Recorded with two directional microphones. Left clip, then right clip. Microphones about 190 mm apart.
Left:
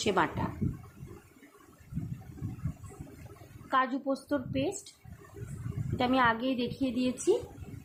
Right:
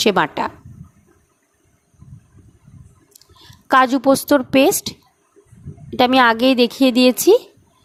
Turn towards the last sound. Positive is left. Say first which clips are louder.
# right 17 dB
turn(degrees=-55)  # may be behind; listen again after turning